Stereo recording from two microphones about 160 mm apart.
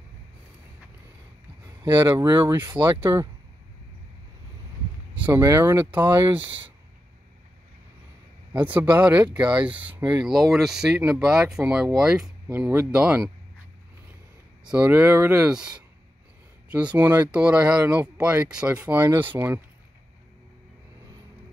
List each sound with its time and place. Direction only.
1.8 s speech: 20° right (ahead or behind)
5.2 s speech: 15° right (ahead or behind)
8.5 s speech: 10° right (ahead or behind)
14.6 s speech: 10° right (ahead or behind)
16.7 s speech: 10° right (ahead or behind)